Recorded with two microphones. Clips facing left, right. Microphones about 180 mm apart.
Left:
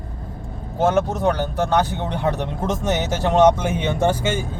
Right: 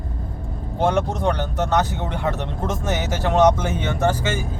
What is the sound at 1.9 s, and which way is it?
Speech, 20° left (ahead or behind).